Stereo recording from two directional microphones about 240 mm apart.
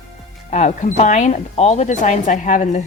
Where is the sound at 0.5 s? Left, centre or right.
Left.